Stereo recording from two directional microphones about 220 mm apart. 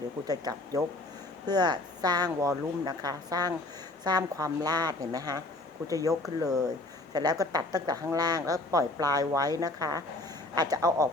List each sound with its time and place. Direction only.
0.3 s a woman's voice: 15° right (ahead or behind)